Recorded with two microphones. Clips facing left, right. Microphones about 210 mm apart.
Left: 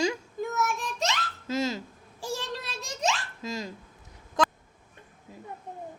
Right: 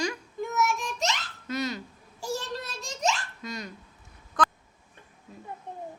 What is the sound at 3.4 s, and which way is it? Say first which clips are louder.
Speech: left 3 dB; 25° left (ahead or behind).